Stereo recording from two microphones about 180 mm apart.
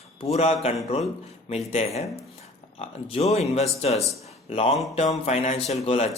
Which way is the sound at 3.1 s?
35° left (ahead or behind).